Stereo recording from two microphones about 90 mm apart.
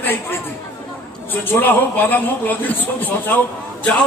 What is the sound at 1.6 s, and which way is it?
A man's voice, 20° left (ahead or behind).